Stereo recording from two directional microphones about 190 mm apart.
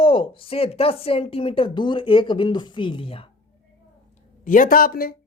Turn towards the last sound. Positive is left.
turn(degrees=50)  # may be behind; listen again after turning